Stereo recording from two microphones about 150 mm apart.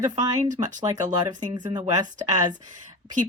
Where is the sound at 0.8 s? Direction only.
25° right (ahead or behind).